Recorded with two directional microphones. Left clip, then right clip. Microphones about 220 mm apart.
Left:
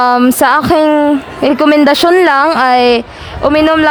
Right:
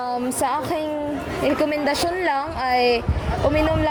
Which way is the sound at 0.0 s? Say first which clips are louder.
Left 15 dB; 40° left (ahead or behind).